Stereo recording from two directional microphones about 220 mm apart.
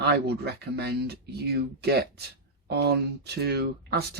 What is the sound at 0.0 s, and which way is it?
Speech, 50° right (ahead or behind).